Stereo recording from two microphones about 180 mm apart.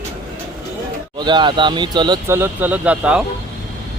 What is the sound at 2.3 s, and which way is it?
Speech, 10° right (ahead or behind).